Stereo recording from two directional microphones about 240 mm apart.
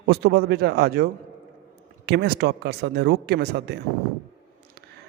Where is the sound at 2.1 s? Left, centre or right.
Right.